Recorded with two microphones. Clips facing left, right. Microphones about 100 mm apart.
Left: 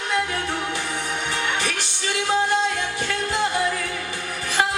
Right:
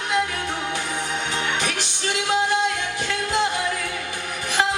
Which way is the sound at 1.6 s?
15° right (ahead or behind).